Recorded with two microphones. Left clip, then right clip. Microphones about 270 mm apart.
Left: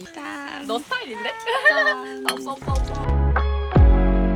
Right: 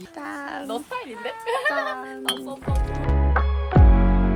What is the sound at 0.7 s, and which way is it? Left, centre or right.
Speech, left.